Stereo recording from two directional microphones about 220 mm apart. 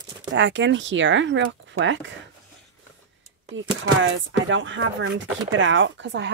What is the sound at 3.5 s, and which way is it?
A woman's voice, 60° right (ahead or behind).